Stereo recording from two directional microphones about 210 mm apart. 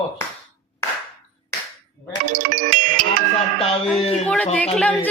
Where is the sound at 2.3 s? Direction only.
40° right (ahead or behind).